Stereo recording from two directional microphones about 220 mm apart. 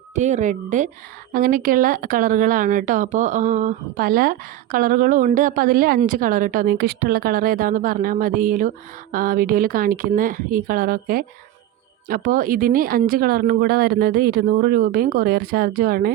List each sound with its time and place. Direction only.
0.1 s a woman's voice: 35° right (ahead or behind)